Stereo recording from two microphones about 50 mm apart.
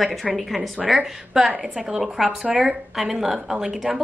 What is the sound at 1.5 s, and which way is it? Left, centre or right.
Speech, centre.